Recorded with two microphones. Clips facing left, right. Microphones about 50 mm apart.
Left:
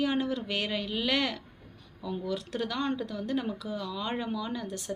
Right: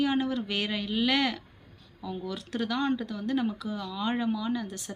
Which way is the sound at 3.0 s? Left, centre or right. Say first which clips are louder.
Right 1 dB; centre.